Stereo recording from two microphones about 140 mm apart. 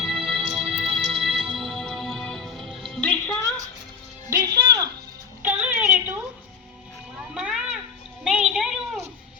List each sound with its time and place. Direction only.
0.0 s music: 5° right (ahead or behind)
0.7 s music: 45° right (ahead or behind)
0.9 s music: centre (ahead or behind)
4.3 s music: 25° right (ahead or behind)
5.4 s a sound: 10° right (ahead or behind)
7.3 s a sound: 5° right (ahead or behind)